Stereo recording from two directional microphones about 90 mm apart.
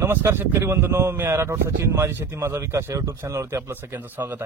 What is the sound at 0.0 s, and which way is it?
A man's voice, 25° right (ahead or behind).